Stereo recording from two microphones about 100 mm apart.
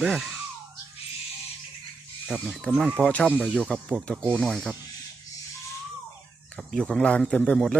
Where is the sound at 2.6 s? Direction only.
10° left (ahead or behind).